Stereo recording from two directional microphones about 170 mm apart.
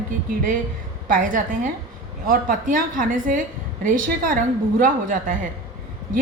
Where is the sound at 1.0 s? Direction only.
50° right (ahead or behind).